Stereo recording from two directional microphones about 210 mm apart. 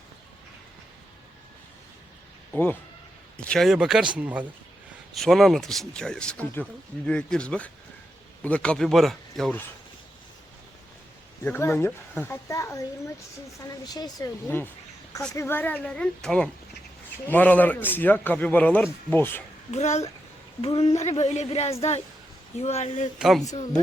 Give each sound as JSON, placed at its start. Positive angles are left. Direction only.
{"t": 3.3, "sound": "speech", "side_deg": 5}
{"t": 11.4, "sound": "a man's voice", "side_deg": 10}
{"t": 13.8, "sound": "a man's voice", "side_deg": 20}
{"t": 19.7, "sound": "a woman's voice", "side_deg": 35}
{"t": 23.1, "sound": "speech", "side_deg": 0}